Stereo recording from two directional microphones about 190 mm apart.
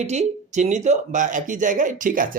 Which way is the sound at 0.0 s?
35° right (ahead or behind).